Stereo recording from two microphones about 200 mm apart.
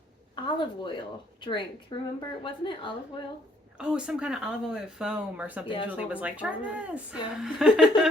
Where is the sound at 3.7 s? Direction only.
5° right (ahead or behind).